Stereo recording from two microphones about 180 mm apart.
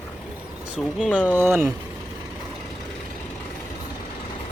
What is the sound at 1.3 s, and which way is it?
Speech, 15° right (ahead or behind).